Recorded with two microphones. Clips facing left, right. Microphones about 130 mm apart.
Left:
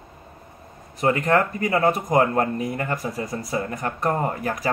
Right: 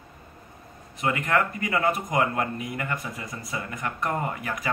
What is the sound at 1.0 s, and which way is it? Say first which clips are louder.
A man's voice: left 5 dB; 35° left (ahead or behind).